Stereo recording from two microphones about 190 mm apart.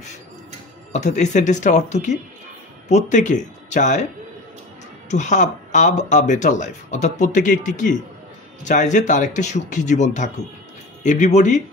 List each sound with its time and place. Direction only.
0.9 s speech: 40° left (ahead or behind)
5.1 s speech: 40° left (ahead or behind)